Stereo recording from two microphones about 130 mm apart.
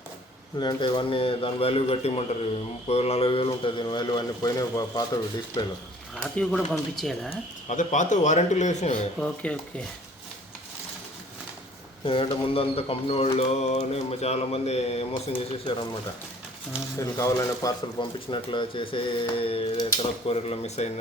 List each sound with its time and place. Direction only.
0.6 s speech: 35° left (ahead or behind)
6.2 s speech: 5° left (ahead or behind)
7.7 s a man's voice: 70° left (ahead or behind)
9.1 s speech: 10° left (ahead or behind)
12.0 s speech: 45° left (ahead or behind)
15.3 s speech: 40° left (ahead or behind)
17.0 s speech: 25° left (ahead or behind)
18.3 s speech: 40° left (ahead or behind); by 21.0 s 60° left (ahead or behind)